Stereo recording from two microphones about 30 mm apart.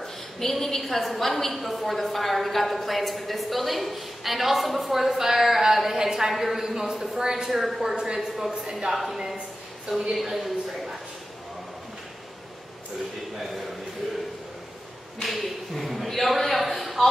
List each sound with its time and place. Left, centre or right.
0.0 s a woman's voice: centre
6.3 s a woman's voice: centre
6.6 s a man's voice: centre
7.2 s a woman's voice: right
7.4 s a woman's voice: centre
7.9 s a woman's voice: right
9.9 s a woman's voice: centre
10.3 s a sound: centre
15.2 s a sound: centre